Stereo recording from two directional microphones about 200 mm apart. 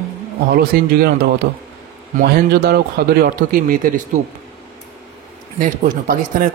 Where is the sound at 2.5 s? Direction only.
50° right (ahead or behind).